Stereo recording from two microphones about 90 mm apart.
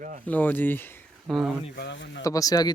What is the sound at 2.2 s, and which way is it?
Speech, 40° left (ahead or behind).